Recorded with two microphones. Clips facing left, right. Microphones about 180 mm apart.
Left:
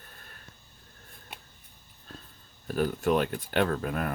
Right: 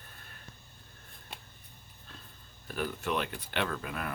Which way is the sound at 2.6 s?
40° left (ahead or behind).